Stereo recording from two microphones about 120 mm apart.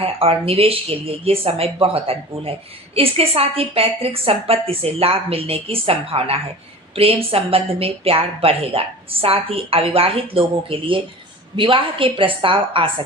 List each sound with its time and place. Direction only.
0.0 s speech: 55° right (ahead or behind)